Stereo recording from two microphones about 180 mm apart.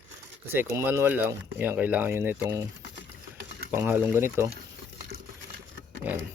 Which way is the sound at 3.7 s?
10° right (ahead or behind).